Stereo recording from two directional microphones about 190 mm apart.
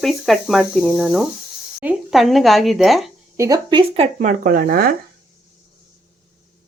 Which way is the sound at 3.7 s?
30° right (ahead or behind).